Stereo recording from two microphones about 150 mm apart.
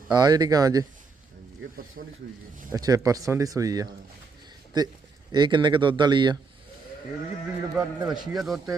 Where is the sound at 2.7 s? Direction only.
25° right (ahead or behind).